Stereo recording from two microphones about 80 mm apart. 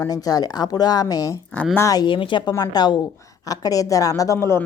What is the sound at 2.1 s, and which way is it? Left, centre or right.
Speech, left.